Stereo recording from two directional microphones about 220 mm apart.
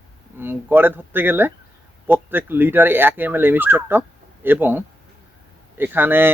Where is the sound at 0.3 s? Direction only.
10° right (ahead or behind).